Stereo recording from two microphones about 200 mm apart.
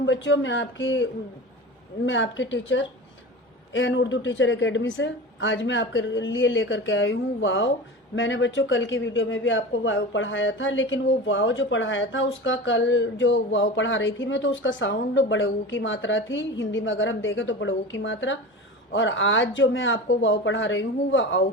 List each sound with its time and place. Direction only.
0.0 s a man's voice: 70° left (ahead or behind)
2.0 s a man's voice: 70° left (ahead or behind)